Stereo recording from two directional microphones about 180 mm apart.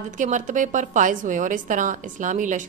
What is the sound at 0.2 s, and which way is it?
A woman's voice, 45° right (ahead or behind).